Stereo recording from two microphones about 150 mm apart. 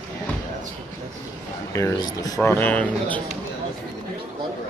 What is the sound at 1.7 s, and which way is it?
Speech, 20° left (ahead or behind).